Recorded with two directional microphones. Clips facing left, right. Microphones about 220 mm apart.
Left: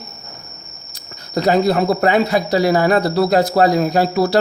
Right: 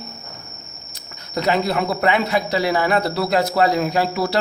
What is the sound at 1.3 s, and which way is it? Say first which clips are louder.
Speech: left 5 dB; 40° left (ahead or behind).